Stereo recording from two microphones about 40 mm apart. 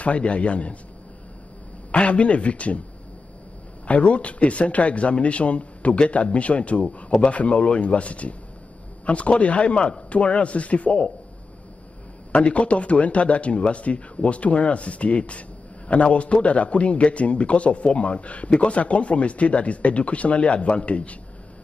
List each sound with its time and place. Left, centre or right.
0.0 s a man's voice: left
1.9 s a man's voice: left
3.8 s a man's voice: left
12.3 s a man's voice: left